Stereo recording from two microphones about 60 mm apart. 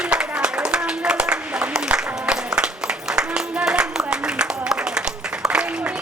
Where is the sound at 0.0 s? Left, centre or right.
Centre.